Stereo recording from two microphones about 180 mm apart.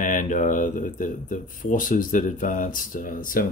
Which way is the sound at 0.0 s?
45° left (ahead or behind).